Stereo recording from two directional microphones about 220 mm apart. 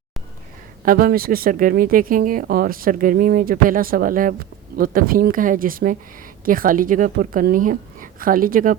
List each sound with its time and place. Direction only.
0.9 s speech: 40° right (ahead or behind)